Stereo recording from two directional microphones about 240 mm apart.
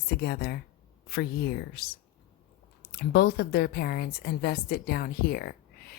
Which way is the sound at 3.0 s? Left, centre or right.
Left.